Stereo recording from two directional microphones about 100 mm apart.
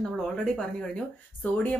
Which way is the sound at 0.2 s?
10° left (ahead or behind).